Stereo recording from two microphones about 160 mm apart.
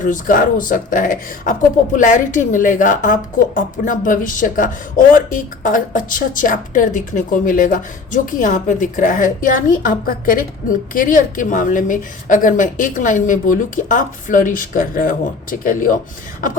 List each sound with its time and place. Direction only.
0.0 s a woman's voice: 55° left (ahead or behind)